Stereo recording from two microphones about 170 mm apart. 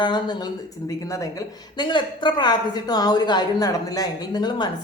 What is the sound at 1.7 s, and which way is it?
A woman's voice, 25° left (ahead or behind).